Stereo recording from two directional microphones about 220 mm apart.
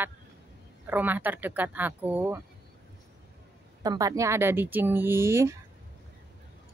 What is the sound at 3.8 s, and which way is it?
Speech, 15° right (ahead or behind).